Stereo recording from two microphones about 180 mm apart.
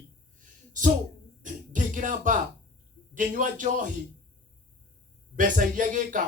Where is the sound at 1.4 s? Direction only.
45° right (ahead or behind).